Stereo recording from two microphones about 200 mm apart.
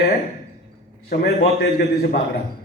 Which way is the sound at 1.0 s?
50° left (ahead or behind).